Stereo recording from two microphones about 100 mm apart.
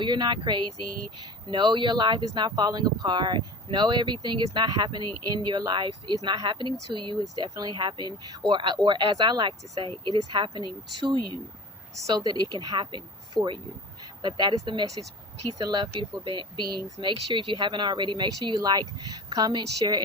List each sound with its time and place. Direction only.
0.0 s speech: 50° right (ahead or behind)